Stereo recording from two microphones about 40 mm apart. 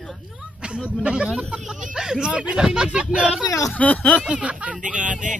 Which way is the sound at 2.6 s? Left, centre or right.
Centre.